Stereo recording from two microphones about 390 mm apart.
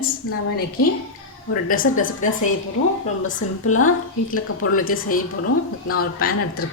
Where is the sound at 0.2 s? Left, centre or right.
Left.